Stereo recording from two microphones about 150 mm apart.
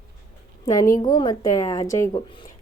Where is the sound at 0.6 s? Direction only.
25° left (ahead or behind).